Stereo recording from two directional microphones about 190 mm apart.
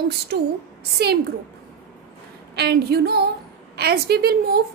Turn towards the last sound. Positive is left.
turn(degrees=-55)  # may be behind; listen again after turning